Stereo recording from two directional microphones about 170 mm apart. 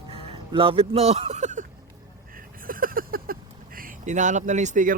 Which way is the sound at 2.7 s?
55° right (ahead or behind).